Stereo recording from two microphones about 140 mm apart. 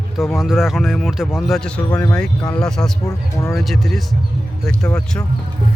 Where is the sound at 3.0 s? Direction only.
20° left (ahead or behind).